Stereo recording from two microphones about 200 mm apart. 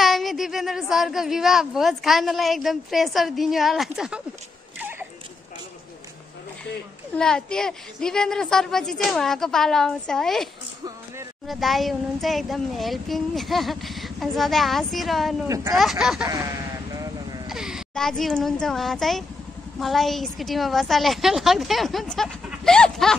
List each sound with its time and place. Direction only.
0.0 s speech: centre (ahead or behind)
4.7 s a sound: 10° right (ahead or behind)
7.2 s speech: 5° left (ahead or behind)
15.4 s speech: 15° right (ahead or behind)
15.7 s speech: centre (ahead or behind)
16.9 s sheep: 20° right (ahead or behind)
17.5 s speech: 5° right (ahead or behind)